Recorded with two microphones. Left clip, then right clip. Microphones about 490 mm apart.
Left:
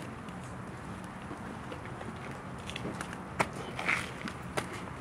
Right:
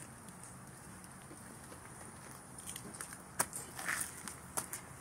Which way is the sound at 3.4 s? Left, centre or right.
Right.